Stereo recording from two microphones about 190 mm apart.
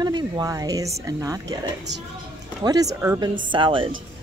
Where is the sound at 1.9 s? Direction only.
65° right (ahead or behind).